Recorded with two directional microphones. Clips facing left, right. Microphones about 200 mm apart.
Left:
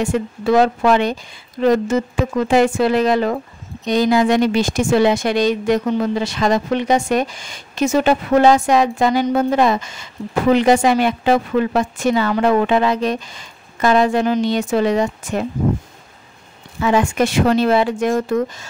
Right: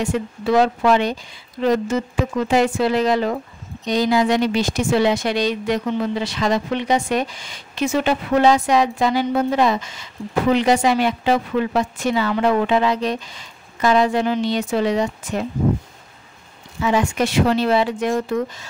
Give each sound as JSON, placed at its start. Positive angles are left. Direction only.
{"t": 0.0, "sound": "speech", "side_deg": 50}
{"t": 16.8, "sound": "speech", "side_deg": 50}